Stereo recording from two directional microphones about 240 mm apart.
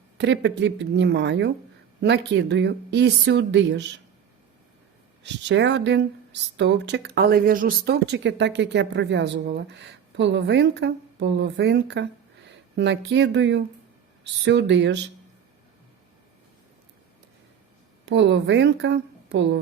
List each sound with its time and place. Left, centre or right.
0.2 s speech: right
5.2 s speech: right
18.0 s a woman's voice: right